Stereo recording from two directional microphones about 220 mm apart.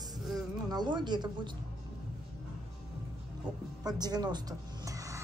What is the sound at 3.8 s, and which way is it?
Speech, 20° right (ahead or behind).